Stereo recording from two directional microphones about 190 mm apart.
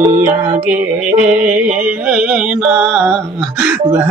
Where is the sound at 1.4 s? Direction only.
10° right (ahead or behind).